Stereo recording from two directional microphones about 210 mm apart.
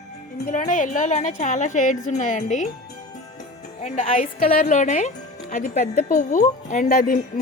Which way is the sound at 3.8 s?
35° left (ahead or behind).